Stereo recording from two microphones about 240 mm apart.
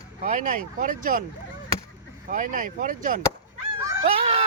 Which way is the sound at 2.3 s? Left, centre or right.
Right.